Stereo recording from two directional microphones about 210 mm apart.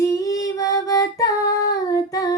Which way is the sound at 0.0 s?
15° left (ahead or behind).